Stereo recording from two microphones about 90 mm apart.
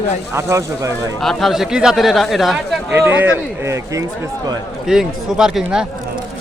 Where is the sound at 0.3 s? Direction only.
30° right (ahead or behind).